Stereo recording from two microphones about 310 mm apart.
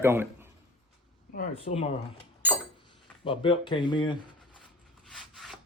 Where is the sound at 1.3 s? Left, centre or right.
Centre.